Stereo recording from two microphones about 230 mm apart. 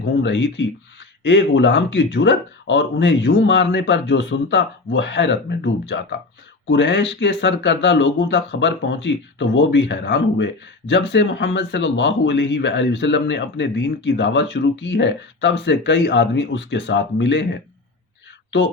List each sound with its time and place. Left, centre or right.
0.0 s speech: left